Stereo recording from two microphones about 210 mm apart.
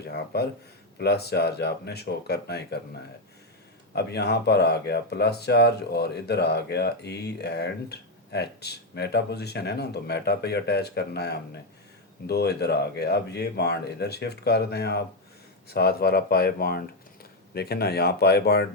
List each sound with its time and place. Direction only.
0.0 s a sound: 50° left (ahead or behind)
0.9 s speech: 50° left (ahead or behind)
3.9 s speech: 50° left (ahead or behind)